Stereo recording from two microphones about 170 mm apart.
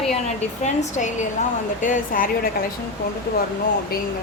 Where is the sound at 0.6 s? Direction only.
45° left (ahead or behind).